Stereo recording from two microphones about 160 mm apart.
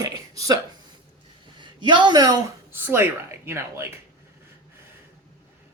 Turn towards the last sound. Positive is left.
turn(degrees=-15)  # may be behind; listen again after turning